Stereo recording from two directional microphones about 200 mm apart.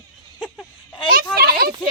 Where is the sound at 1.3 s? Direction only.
50° right (ahead or behind).